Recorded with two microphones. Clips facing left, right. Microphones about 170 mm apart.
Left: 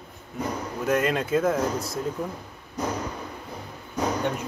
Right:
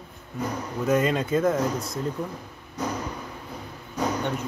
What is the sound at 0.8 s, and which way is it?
Speech, centre (ahead or behind).